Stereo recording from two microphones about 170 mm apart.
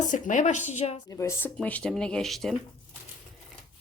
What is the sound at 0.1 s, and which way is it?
Speech, 45° left (ahead or behind).